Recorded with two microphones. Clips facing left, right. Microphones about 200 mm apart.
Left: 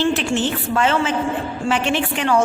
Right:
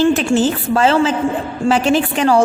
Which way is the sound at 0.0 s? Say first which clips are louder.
Right 6 dB; 40° right (ahead or behind).